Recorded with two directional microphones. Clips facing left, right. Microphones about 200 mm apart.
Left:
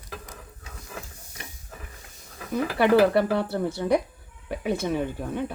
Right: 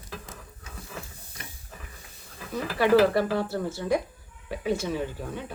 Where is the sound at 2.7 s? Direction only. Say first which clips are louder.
Left 1 dB; 60° left (ahead or behind).